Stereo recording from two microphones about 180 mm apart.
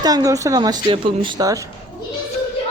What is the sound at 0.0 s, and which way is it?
Speech, 20° right (ahead or behind).